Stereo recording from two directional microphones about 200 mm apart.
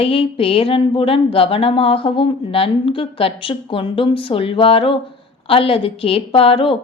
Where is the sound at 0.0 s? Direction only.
30° left (ahead or behind).